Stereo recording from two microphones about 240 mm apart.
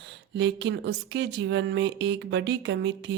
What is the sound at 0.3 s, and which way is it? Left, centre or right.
A woman's voice, right.